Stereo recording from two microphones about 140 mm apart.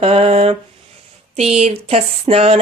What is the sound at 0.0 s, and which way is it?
Speech, 45° right (ahead or behind).